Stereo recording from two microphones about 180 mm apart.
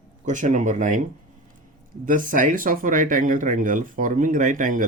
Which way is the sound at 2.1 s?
45° right (ahead or behind).